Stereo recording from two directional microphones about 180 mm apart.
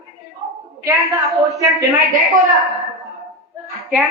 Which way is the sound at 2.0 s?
Centre (ahead or behind).